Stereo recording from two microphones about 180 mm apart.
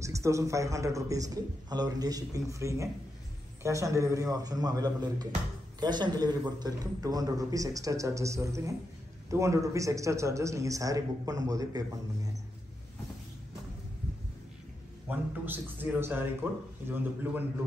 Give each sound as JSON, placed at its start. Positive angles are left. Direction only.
{"t": 0.0, "sound": "a man's voice", "side_deg": -15}
{"t": 15.0, "sound": "speech", "side_deg": -10}